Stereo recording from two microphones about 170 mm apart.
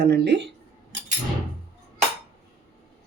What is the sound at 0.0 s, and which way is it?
Speech, 90° right.